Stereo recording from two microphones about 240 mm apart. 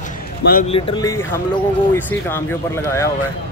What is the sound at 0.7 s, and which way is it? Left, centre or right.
Speech, centre.